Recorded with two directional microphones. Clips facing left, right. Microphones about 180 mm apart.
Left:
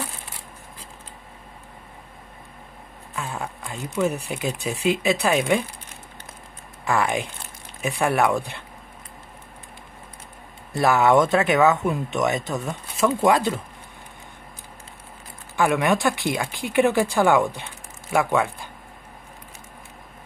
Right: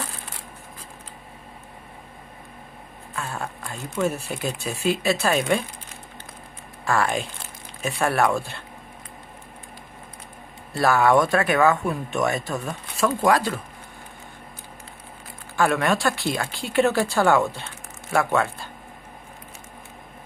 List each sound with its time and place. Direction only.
3.2 s a sound: 15° left (ahead or behind)
4.0 s speech: 15° left (ahead or behind)
6.8 s speech: 15° left (ahead or behind)
10.7 s speech: 20° left (ahead or behind)
15.5 s speech: 15° left (ahead or behind)